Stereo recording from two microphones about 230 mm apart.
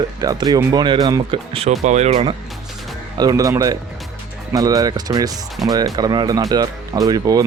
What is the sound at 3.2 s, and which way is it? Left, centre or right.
Speech, centre.